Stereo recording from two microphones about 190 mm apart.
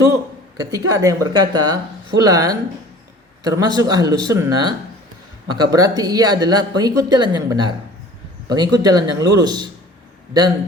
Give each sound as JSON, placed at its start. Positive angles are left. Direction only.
{"t": 0.5, "sound": "speech", "side_deg": -20}